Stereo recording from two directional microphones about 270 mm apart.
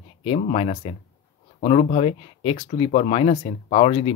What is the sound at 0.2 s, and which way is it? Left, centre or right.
Speech, left.